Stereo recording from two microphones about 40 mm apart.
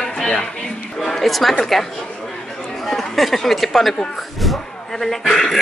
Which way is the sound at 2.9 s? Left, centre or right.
Centre.